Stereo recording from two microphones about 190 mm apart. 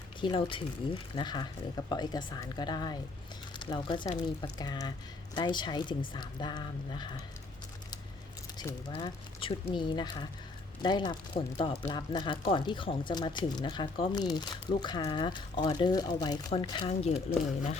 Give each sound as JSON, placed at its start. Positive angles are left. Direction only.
{"t": 0.2, "sound": "speech", "side_deg": 25}
{"t": 8.5, "sound": "speech", "side_deg": 25}